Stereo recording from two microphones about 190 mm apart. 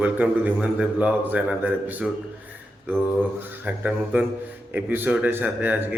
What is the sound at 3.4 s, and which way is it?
A man's voice, 5° right (ahead or behind).